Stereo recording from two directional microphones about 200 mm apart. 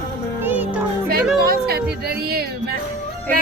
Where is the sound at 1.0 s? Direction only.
50° right (ahead or behind).